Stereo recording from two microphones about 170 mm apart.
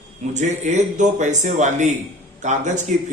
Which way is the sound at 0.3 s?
45° right (ahead or behind).